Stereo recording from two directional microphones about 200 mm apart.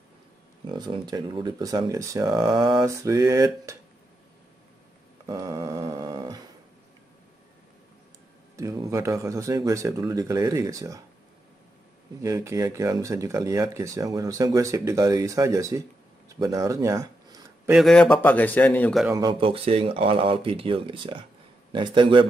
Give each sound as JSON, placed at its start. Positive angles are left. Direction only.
{"t": 0.7, "sound": "speech", "side_deg": -20}
{"t": 5.2, "sound": "dog", "side_deg": -20}
{"t": 8.5, "sound": "speech", "side_deg": -15}
{"t": 12.2, "sound": "speech", "side_deg": -15}
{"t": 16.3, "sound": "a sound", "side_deg": -15}
{"t": 17.7, "sound": "a man's voice", "side_deg": 0}
{"t": 19.1, "sound": "speech", "side_deg": -25}